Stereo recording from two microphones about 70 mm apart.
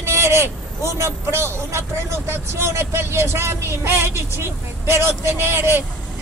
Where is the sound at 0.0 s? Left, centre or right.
Right.